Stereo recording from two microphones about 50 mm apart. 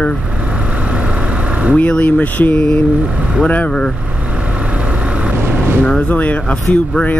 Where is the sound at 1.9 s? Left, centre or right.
Left.